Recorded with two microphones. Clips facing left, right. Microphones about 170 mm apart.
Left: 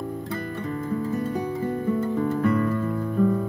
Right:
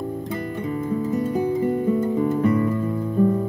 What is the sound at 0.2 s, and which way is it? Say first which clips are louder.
Music: right 3 dB; 15° right (ahead or behind).